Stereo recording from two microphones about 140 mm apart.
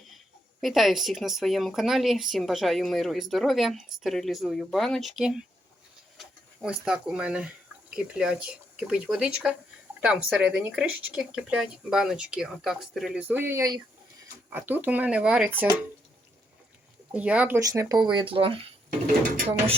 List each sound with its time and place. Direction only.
0.6 s speech: centre (ahead or behind)
13.2 s speech: 15° right (ahead or behind)
14.5 s speech: 15° right (ahead or behind)
17.2 s speech: 10° right (ahead or behind)
17.6 s speech: 25° right (ahead or behind); by 18.6 s 40° right (ahead or behind)